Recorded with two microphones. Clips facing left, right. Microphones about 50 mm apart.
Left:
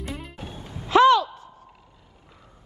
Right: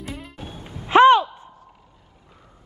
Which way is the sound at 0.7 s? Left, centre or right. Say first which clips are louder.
Right 3 dB; right.